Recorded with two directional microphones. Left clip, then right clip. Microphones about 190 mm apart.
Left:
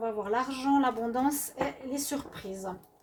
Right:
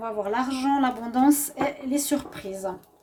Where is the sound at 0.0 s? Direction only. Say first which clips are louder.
Right 3 dB; 45° right (ahead or behind).